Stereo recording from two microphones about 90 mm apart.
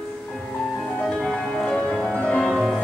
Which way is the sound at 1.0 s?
5° left (ahead or behind).